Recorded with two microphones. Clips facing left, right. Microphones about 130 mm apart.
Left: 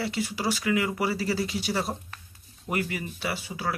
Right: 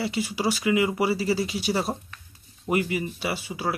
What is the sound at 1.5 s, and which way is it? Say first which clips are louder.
Speech: right 3 dB; 10° right (ahead or behind).